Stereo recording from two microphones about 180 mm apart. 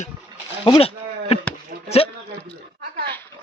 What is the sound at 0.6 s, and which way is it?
Speech, 30° left (ahead or behind).